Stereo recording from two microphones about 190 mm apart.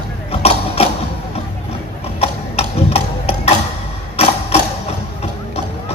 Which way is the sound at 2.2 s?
35° left (ahead or behind).